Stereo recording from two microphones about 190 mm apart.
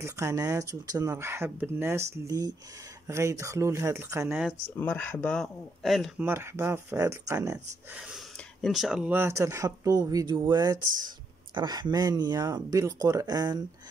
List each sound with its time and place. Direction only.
0.0 s speech: 15° right (ahead or behind)
4.7 s speech: 10° left (ahead or behind)
6.2 s speech: 15° right (ahead or behind)
8.0 s speech: centre (ahead or behind); by 13.6 s 20° right (ahead or behind)